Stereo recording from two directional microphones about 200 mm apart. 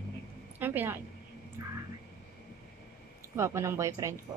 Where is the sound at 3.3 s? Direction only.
15° right (ahead or behind).